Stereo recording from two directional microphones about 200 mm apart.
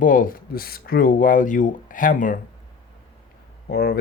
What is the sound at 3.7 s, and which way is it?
Speech, 50° left (ahead or behind).